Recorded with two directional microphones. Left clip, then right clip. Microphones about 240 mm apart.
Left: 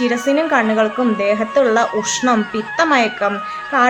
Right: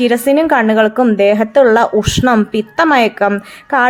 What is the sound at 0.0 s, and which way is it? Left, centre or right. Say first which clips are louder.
Speech: right 5 dB; right.